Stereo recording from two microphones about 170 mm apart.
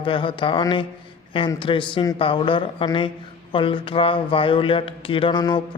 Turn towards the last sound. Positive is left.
turn(degrees=25)  # may be behind; listen again after turning